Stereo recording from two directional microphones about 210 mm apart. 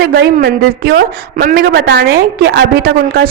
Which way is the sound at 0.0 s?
45° right (ahead or behind).